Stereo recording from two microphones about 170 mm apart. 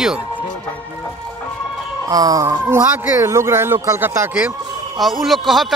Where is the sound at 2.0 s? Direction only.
20° right (ahead or behind).